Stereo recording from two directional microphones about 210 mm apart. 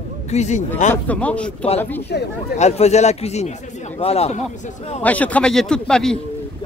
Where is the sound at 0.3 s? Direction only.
35° left (ahead or behind).